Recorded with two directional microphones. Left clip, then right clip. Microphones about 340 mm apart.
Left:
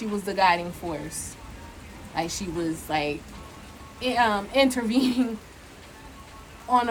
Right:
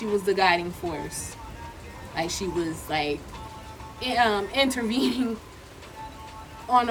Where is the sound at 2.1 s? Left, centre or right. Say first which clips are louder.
Right 1 dB; centre.